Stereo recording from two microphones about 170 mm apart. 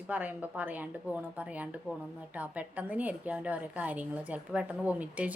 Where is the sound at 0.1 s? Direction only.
10° right (ahead or behind).